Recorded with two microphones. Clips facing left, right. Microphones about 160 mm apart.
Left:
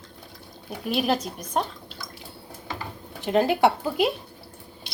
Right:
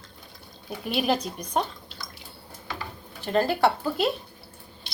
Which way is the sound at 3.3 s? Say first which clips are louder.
Left 2 dB; 15° left (ahead or behind).